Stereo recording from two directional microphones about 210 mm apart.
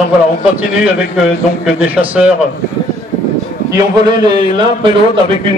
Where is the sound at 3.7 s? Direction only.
20° right (ahead or behind).